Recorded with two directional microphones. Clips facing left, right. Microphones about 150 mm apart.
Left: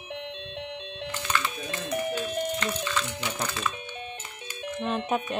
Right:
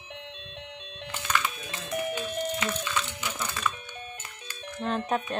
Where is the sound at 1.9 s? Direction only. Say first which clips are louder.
Left 1 dB; 5° right (ahead or behind).